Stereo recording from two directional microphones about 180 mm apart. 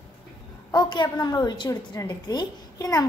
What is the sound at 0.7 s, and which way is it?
A woman's voice, 25° left (ahead or behind).